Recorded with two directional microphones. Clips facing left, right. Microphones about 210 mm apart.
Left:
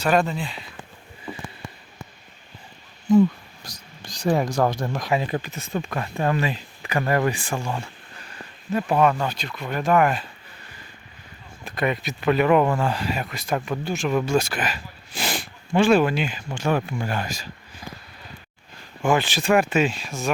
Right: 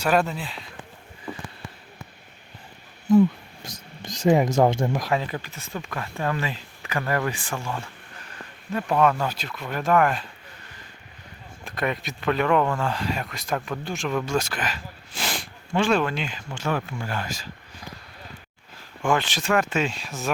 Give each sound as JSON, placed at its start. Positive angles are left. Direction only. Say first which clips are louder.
{"t": 0.0, "sound": "speech", "louder": "left 1 dB", "side_deg": -5}
{"t": 3.6, "sound": "speech", "louder": "right 4 dB", "side_deg": -25}
{"t": 5.2, "sound": "speech", "louder": "left 5 dB", "side_deg": 20}
{"t": 8.7, "sound": "speech", "louder": "left 2 dB", "side_deg": 5}
{"t": 11.6, "sound": "speech", "louder": "left 3 dB", "side_deg": 0}
{"t": 19.0, "sound": "speech", "louder": "left 3 dB", "side_deg": 5}